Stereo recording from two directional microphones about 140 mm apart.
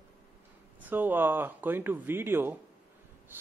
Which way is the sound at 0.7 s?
10° right (ahead or behind).